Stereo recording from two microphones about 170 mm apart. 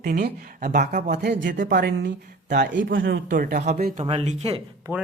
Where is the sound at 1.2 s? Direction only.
85° right.